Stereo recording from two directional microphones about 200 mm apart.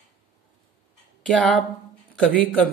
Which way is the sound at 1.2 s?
Centre (ahead or behind).